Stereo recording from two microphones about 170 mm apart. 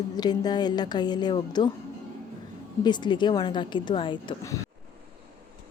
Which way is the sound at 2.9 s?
25° left (ahead or behind).